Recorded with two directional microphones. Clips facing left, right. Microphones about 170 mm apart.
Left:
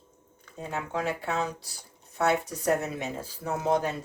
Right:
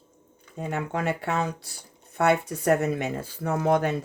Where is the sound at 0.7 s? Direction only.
60° right (ahead or behind).